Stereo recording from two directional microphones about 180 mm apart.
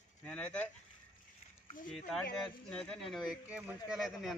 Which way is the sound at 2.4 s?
5° left (ahead or behind).